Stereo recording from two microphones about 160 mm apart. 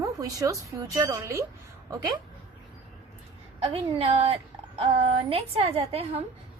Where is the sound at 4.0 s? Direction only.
40° right (ahead or behind).